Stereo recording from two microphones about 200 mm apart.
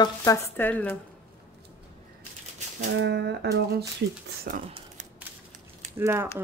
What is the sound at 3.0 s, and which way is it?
Speech, 60° right (ahead or behind).